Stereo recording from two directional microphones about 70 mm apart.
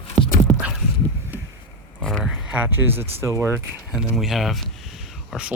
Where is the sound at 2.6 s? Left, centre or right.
Right.